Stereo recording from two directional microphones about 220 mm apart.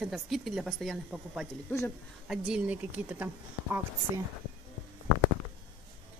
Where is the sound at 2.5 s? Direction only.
5° right (ahead or behind).